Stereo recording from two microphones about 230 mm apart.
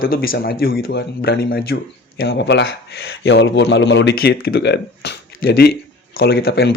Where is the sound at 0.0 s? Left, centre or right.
Left.